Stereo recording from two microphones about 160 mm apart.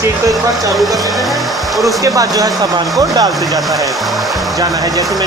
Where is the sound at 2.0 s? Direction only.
20° right (ahead or behind).